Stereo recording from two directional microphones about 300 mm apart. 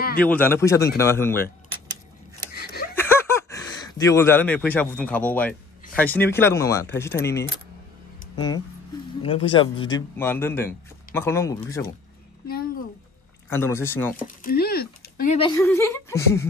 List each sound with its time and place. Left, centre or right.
0.2 s a man's voice: centre
2.5 s a sound: left
3.0 s a man's voice: centre
9.2 s a man's voice: centre
13.5 s a man's voice: centre
14.2 s a sound: left
15.3 s a man's voice: centre